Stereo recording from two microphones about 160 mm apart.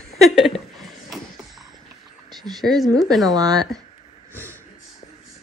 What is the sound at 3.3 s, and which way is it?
Speech, 25° right (ahead or behind).